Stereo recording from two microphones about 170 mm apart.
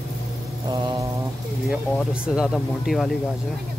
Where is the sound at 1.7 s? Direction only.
5° right (ahead or behind).